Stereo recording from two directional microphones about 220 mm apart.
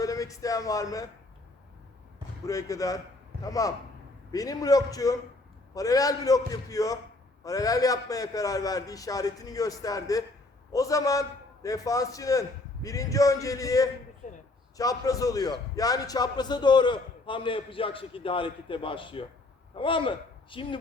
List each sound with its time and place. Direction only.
0.0 s speech: 15° left (ahead or behind)
2.5 s a man's voice: 15° left (ahead or behind)
14.2 s a sound: 35° left (ahead or behind)
14.8 s a man's voice: 15° left (ahead or behind)